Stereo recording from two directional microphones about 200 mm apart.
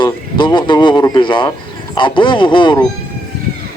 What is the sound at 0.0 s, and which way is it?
A man's voice, 25° left (ahead or behind).